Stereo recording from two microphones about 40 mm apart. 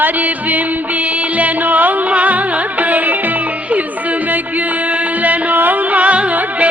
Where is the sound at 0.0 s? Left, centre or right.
Right.